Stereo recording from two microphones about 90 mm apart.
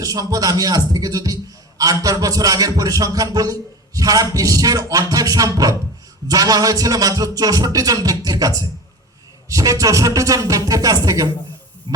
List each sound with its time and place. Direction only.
0.0 s a sound: 45° right (ahead or behind)
9.5 s a man's voice: 35° right (ahead or behind)
11.9 s hum: 50° right (ahead or behind)